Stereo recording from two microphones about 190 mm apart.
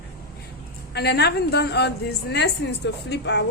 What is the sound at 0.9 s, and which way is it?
A woman's voice, 60° left (ahead or behind).